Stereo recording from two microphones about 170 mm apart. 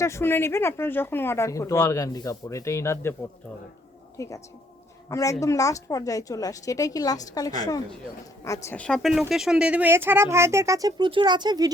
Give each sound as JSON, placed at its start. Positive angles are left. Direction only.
{"t": 0.0, "sound": "speech", "side_deg": 15}
{"t": 4.2, "sound": "a woman's voice", "side_deg": 20}